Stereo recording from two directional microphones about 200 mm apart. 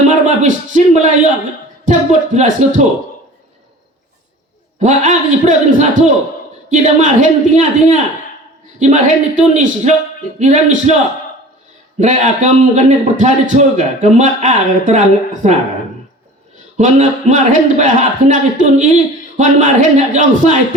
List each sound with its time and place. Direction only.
0.1 s a sound: 40° right (ahead or behind)
1.8 s a man's voice: 35° right (ahead or behind)
4.8 s a man's voice: 40° right (ahead or behind)
11.9 s a man's voice: 40° right (ahead or behind)
16.7 s a man's voice: 40° right (ahead or behind)